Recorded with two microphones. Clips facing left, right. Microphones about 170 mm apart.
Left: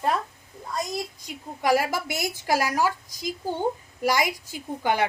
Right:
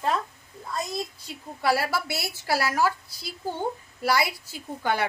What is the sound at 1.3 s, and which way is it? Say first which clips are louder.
A woman's voice: left 3 dB; 15° left (ahead or behind).